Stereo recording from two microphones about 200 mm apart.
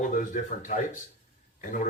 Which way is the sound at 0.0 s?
40° left (ahead or behind).